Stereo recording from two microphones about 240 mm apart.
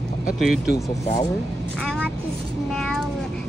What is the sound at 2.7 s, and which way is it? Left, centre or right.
Cat, centre.